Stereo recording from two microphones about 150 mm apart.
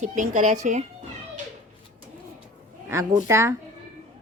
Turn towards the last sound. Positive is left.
turn(degrees=-20)  # may be behind; listen again after turning